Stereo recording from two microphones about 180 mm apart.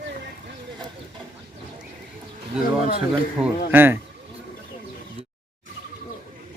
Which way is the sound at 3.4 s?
10° right (ahead or behind).